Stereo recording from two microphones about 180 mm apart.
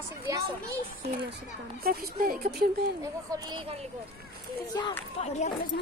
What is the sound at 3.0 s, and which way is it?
Speech, 25° right (ahead or behind).